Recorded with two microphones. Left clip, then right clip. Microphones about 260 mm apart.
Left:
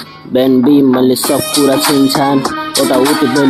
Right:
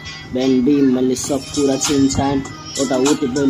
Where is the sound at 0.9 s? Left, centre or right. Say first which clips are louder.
Left 7 dB; centre.